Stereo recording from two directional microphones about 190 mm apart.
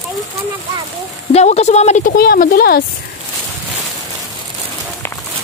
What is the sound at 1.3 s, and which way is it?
Speech, 35° left (ahead or behind).